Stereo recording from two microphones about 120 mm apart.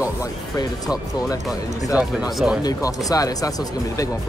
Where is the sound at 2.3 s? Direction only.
Centre (ahead or behind).